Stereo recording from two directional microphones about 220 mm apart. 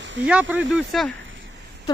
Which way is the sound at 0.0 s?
55° right (ahead or behind).